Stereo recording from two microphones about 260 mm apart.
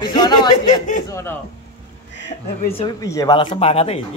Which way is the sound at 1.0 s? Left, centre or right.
Centre.